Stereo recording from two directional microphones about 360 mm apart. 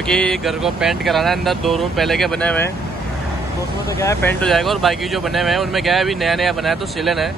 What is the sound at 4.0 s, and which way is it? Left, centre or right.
Speech, centre.